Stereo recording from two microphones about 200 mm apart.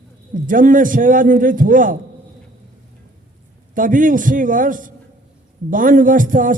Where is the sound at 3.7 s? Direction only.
40° right (ahead or behind).